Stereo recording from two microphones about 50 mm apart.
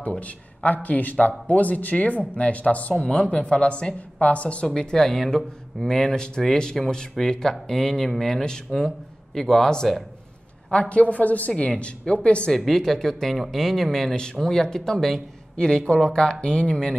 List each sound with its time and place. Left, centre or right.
0.0 s a woman's voice: left
4.6 s a man's voice: centre
7.2 s a man's voice: centre
10.7 s a woman's voice: left
12.5 s a man's voice: centre